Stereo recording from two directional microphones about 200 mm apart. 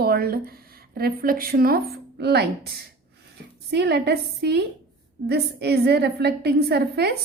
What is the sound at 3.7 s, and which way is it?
A woman's voice, 55° right (ahead or behind).